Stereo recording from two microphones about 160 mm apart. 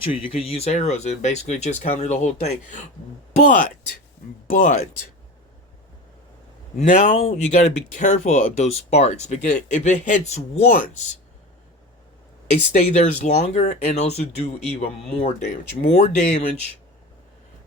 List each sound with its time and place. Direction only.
0.0 s speech: 35° left (ahead or behind); by 4.8 s 55° left (ahead or behind)
6.7 s speech: 50° left (ahead or behind)
12.5 s speech: 45° left (ahead or behind)